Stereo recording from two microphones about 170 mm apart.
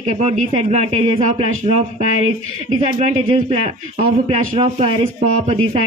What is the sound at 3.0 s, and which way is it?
Speech, 40° right (ahead or behind).